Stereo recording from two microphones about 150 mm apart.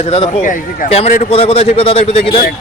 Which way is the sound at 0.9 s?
45° left (ahead or behind).